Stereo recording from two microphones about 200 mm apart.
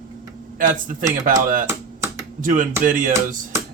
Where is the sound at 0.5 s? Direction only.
45° right (ahead or behind).